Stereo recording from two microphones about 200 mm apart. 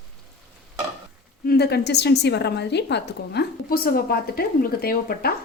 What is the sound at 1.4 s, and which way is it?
A woman's voice, 55° left (ahead or behind).